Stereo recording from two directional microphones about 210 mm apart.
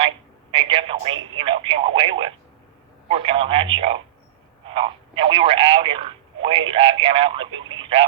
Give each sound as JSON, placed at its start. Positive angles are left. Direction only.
{"t": 0.5, "sound": "speech", "side_deg": -25}